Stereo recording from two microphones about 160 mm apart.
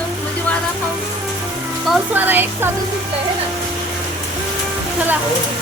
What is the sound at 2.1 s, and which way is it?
Speech, 10° right (ahead or behind).